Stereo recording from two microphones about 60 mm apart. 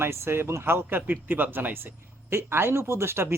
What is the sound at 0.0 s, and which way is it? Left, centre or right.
Speech, right.